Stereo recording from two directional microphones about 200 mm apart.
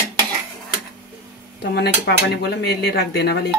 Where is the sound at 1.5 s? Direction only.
55° left (ahead or behind).